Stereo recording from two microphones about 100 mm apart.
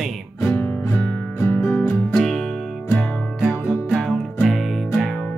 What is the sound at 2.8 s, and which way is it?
Music, 15° left (ahead or behind).